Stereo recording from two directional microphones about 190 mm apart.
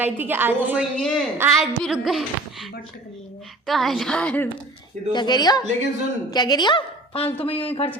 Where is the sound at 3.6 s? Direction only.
Centre (ahead or behind).